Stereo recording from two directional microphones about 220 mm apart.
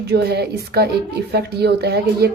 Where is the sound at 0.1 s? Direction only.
45° right (ahead or behind).